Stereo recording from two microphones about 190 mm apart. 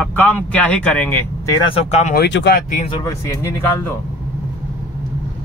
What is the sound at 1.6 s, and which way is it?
Speech, 30° left (ahead or behind).